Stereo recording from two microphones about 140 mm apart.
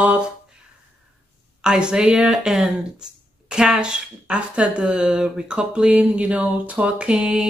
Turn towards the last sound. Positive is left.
turn(degrees=-5)  # may be behind; listen again after turning